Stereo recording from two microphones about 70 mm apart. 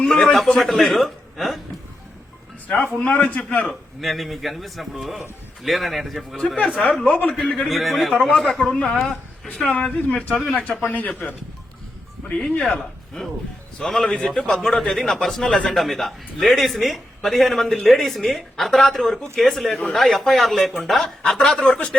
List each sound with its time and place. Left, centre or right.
0.0 s speech: centre
2.8 s a man's voice: left
3.7 s speech: centre
7.0 s a man's voice: left
7.7 s a man's voice: centre; by 11.2 s left
12.4 s speech: centre